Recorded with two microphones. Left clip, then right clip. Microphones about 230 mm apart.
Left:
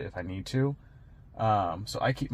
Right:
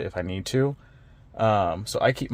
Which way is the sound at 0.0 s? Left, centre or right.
Right.